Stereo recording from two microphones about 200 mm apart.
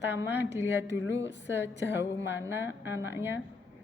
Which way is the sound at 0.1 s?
10° right (ahead or behind).